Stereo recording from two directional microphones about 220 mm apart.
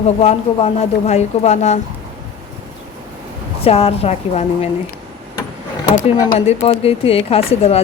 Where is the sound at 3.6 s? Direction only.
25° left (ahead or behind).